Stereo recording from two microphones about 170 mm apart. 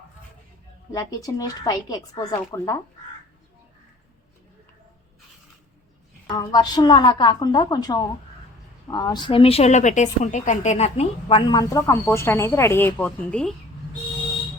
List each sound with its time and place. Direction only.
0.9 s a woman's voice: 20° left (ahead or behind)
6.2 s a woman's voice: 25° left (ahead or behind); by 13.5 s 5° left (ahead or behind)